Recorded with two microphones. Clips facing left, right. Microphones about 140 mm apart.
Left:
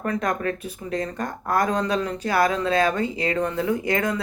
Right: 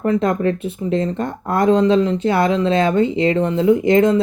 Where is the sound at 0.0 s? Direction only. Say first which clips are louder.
Right 8 dB; 25° right (ahead or behind).